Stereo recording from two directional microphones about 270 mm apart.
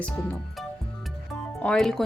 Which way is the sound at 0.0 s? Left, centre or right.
Centre.